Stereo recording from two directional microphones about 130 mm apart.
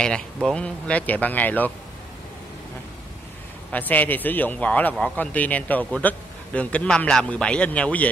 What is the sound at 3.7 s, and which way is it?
A man's voice, 15° left (ahead or behind).